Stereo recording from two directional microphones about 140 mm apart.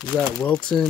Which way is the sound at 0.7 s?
15° left (ahead or behind).